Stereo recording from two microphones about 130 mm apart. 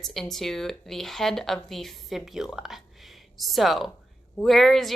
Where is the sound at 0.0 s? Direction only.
5° left (ahead or behind).